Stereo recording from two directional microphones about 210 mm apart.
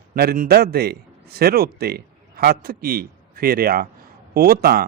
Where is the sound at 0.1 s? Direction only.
45° right (ahead or behind).